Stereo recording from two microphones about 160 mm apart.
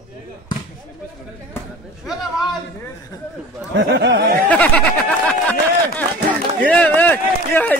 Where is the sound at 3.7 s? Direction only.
90° right.